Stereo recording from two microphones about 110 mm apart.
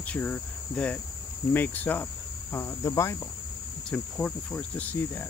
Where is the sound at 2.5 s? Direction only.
25° left (ahead or behind).